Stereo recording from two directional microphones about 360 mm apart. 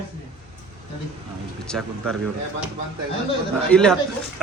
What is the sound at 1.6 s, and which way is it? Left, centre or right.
Speech, centre.